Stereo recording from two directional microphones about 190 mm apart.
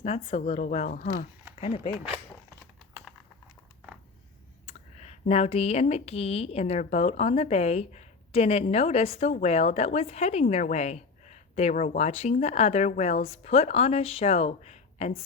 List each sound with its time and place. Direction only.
0.0 s speech: 35° left (ahead or behind)
0.9 s speech: 50° left (ahead or behind)
1.6 s speech: 30° left (ahead or behind)
4.6 s speech: 35° left (ahead or behind)